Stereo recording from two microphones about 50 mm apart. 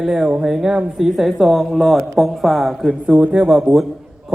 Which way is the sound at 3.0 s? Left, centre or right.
Right.